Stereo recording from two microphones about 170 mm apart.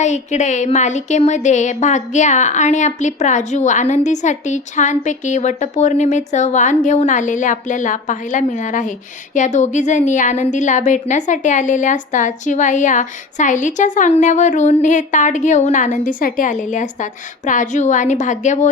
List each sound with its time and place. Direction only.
0.0 s a woman's voice: 45° left (ahead or behind)